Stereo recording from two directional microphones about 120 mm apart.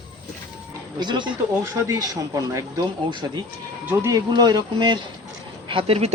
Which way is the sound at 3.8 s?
25° right (ahead or behind).